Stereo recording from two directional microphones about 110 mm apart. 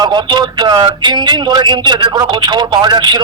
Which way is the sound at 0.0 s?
40° right (ahead or behind).